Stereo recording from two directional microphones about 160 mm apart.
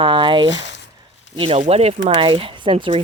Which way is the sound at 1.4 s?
40° right (ahead or behind).